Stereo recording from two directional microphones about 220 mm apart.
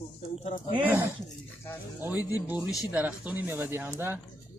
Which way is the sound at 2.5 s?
5° right (ahead or behind).